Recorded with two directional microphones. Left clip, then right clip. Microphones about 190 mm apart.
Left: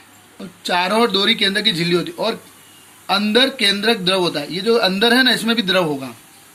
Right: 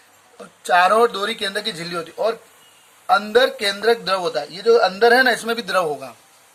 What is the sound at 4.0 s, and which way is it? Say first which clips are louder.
Speech: left 3 dB; 50° right (ahead or behind).